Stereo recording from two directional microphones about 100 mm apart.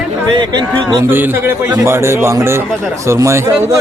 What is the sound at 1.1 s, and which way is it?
A man's voice, 20° right (ahead or behind).